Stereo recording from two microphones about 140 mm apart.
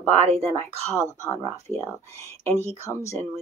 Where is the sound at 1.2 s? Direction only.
20° left (ahead or behind).